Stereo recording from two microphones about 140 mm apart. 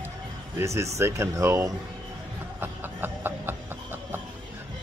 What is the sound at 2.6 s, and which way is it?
Music, 15° right (ahead or behind).